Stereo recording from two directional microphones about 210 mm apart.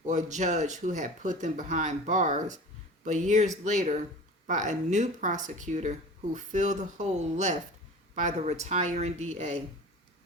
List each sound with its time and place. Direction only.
0.0 s speech: 35° right (ahead or behind)